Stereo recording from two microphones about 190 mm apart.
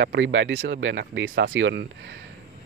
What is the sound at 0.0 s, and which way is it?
Speech, 65° right (ahead or behind).